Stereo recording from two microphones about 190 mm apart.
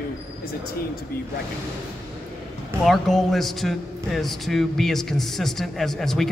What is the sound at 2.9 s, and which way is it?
Speech, centre (ahead or behind).